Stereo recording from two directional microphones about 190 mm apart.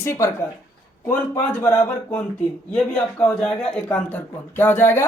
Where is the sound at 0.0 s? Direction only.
15° left (ahead or behind).